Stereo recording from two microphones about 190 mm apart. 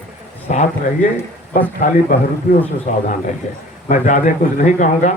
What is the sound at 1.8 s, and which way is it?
A man's voice, 40° left (ahead or behind).